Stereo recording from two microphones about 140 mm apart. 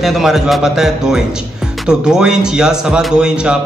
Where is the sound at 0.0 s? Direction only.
Centre (ahead or behind).